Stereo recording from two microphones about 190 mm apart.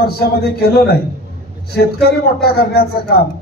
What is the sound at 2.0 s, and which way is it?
A man's voice, 55° left (ahead or behind).